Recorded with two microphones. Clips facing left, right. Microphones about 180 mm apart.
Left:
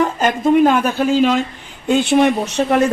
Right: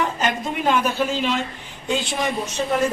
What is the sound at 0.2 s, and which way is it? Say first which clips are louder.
Speech: left 11 dB; 45° left (ahead or behind).